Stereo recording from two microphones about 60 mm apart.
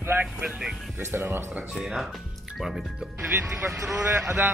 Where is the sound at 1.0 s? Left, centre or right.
Right.